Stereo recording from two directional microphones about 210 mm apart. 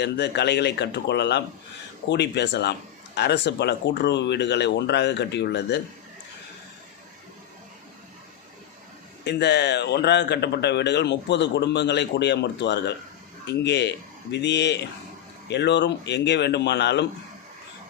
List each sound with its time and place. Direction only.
0.0 s speech: 55° left (ahead or behind)
9.2 s speech: 55° left (ahead or behind)